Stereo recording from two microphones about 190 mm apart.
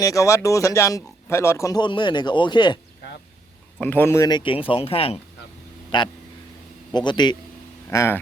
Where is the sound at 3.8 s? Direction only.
10° left (ahead or behind).